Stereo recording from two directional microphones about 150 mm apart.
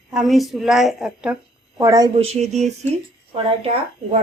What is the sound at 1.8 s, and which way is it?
Speech, 25° right (ahead or behind).